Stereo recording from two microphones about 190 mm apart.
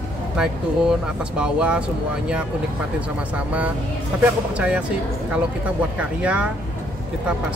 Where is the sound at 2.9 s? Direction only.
5° right (ahead or behind).